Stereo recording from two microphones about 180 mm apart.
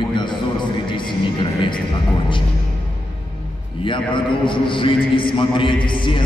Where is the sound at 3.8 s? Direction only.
30° left (ahead or behind).